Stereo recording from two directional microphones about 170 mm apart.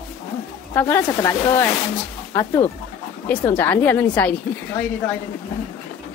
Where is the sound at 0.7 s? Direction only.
15° left (ahead or behind).